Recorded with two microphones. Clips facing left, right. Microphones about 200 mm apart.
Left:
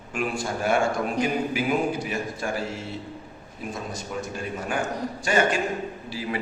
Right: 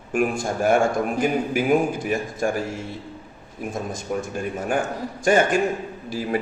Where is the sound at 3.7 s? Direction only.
50° right (ahead or behind).